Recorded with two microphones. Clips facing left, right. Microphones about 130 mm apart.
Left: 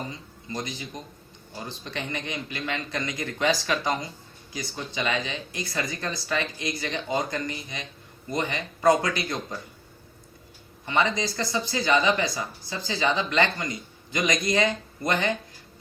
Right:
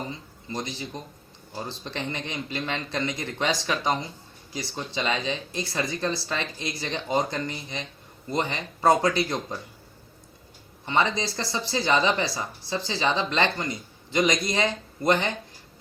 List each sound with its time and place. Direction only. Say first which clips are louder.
0.5 s speech: right 1 dB; 30° right (ahead or behind)
10.8 s speech: even; 25° right (ahead or behind)